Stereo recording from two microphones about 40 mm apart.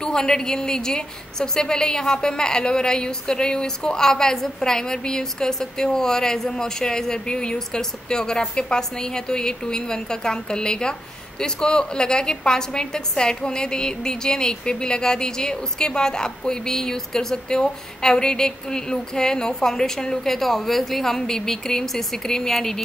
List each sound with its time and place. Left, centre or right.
0.0 s a woman's voice: centre